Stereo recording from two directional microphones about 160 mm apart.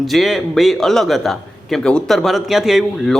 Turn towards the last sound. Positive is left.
turn(degrees=0)  # may be behind; listen again after turning